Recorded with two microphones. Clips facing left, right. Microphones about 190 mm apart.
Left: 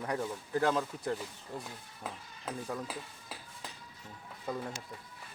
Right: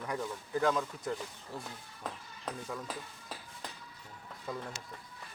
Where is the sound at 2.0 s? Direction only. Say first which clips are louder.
Right 1 dB; 5° left (ahead or behind).